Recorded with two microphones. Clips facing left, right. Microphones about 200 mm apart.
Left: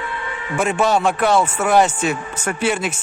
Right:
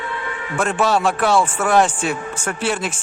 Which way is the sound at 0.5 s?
10° left (ahead or behind).